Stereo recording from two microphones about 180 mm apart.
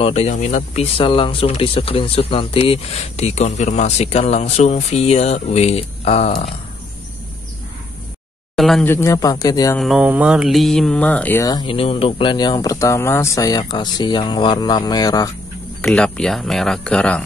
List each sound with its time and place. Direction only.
0.0 s speech: 35° left (ahead or behind)
8.5 s speech: centre (ahead or behind)
8.9 s speech: 15° left (ahead or behind)
9.8 s speech: 5° right (ahead or behind)
11.4 s speech: 25° left (ahead or behind)
15.8 s speech: 5° left (ahead or behind)